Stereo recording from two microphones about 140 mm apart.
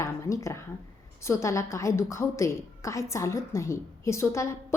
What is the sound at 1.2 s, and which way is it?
A woman's voice, 20° left (ahead or behind).